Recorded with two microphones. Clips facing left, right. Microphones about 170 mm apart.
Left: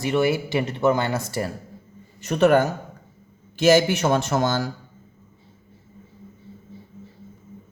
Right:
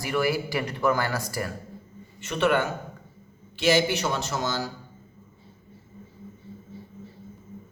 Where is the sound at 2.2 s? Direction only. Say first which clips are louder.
Left 6 dB; 40° left (ahead or behind).